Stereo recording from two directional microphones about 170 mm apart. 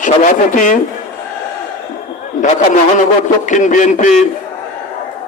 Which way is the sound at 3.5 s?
50° left (ahead or behind).